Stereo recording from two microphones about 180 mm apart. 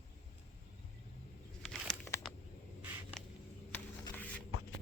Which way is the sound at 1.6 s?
5° left (ahead or behind).